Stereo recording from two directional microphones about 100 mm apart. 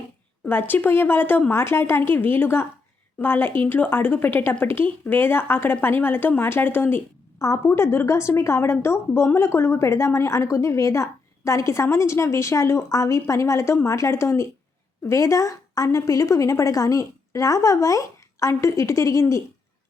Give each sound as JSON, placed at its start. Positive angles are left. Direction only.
{"t": 0.4, "sound": "a woman's voice", "side_deg": 20}